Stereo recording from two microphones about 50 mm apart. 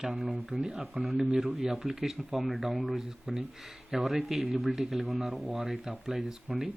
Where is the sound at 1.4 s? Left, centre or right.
Centre.